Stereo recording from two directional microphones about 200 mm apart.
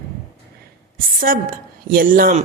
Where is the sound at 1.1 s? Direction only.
45° right (ahead or behind).